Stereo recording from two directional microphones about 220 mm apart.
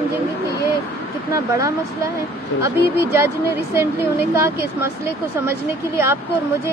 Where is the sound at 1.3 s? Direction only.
15° right (ahead or behind).